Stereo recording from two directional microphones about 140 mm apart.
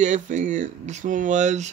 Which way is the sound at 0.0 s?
60° right (ahead or behind).